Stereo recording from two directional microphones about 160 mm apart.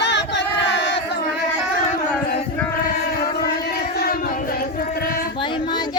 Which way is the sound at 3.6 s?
80° left.